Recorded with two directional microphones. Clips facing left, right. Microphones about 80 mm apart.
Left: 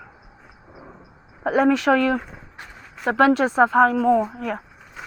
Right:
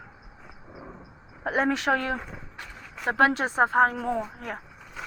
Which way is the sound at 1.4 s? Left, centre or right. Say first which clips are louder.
Left 7 dB; left.